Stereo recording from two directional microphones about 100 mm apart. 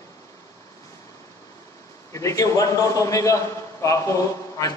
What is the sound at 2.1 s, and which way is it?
A man's voice, 35° left (ahead or behind).